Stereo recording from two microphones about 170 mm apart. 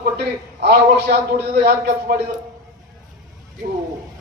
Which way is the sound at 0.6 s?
70° right (ahead or behind).